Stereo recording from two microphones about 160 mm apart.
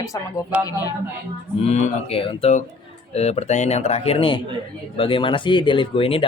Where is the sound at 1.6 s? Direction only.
40° left (ahead or behind).